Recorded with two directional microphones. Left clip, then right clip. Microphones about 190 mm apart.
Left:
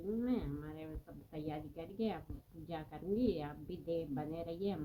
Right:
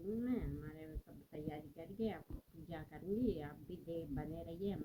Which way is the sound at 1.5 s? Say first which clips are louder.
Left 5 dB; 25° right (ahead or behind).